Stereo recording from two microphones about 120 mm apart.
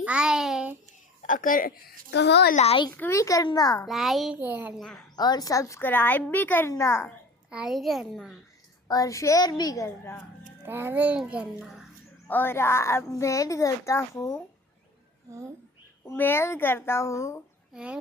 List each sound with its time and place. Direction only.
0.0 s a sound: 10° right (ahead or behind)
2.5 s a child's voice: 70° left (ahead or behind)
2.9 s a child's voice: 15° left (ahead or behind)
3.2 s a woman's voice: 30° left (ahead or behind)
3.8 s a child's voice: centre (ahead or behind)
4.4 s a child's voice: 15° right (ahead or behind)
4.8 s a child's voice: 5° left (ahead or behind)
5.1 s a woman's voice: 35° left (ahead or behind)
7.5 s a child's voice: 5° right (ahead or behind)
8.9 s a woman's voice: 30° left (ahead or behind)
10.6 s a child's voice: 20° right (ahead or behind)
12.3 s a woman's voice: 20° left (ahead or behind)
16.0 s a woman's voice: 20° left (ahead or behind)
17.7 s a child's voice: 5° right (ahead or behind)